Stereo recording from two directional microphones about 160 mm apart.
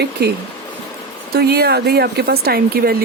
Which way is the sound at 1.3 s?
80° right.